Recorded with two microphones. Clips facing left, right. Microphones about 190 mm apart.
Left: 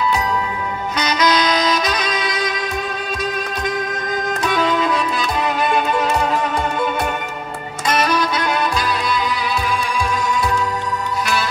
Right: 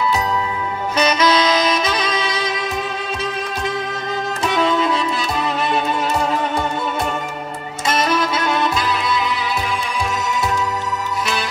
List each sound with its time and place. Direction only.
0.9 s saxophone: 25° right (ahead or behind)
3.2 s music: 25° right (ahead or behind)
7.9 s music: 25° right (ahead or behind)